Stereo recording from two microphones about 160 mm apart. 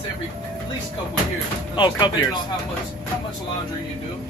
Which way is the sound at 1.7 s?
30° left (ahead or behind).